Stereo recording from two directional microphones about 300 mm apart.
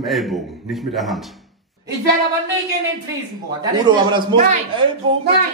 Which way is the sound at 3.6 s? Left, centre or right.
Centre.